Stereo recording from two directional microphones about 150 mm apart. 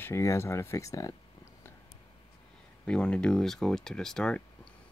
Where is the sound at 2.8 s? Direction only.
5° left (ahead or behind).